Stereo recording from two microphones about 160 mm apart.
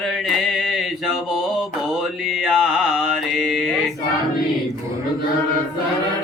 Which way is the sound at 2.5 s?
5° right (ahead or behind).